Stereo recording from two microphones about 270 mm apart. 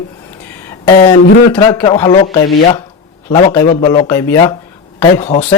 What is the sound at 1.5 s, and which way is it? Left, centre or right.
Speech, centre.